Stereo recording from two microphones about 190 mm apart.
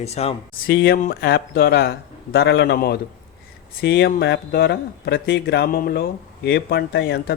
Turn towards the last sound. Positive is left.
turn(degrees=60)  # may be behind; listen again after turning